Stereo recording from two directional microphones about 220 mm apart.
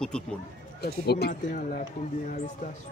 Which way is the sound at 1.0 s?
45° left (ahead or behind).